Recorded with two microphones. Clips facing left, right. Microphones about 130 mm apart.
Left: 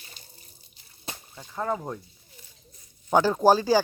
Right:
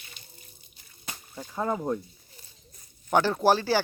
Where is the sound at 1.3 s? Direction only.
10° right (ahead or behind).